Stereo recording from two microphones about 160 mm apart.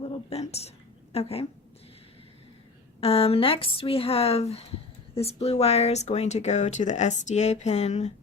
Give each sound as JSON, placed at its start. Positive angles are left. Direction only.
{"t": 0.3, "sound": "speech", "side_deg": 40}
{"t": 3.0, "sound": "speech", "side_deg": 35}